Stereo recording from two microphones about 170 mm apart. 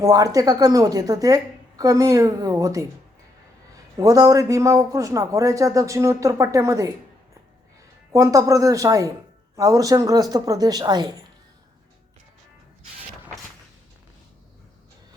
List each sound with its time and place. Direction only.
0.0 s speech: 20° right (ahead or behind)
3.9 s speech: 20° right (ahead or behind)
8.1 s speech: 20° right (ahead or behind)